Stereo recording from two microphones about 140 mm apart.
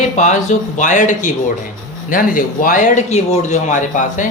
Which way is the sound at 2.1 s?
80° left.